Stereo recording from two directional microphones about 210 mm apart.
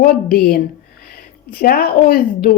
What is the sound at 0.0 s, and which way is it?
A woman's voice, 45° left (ahead or behind).